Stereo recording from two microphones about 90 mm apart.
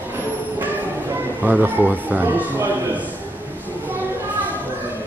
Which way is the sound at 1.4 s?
20° right (ahead or behind).